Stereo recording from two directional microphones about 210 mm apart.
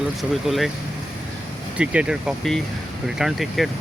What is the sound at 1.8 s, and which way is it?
Speech, 5° right (ahead or behind).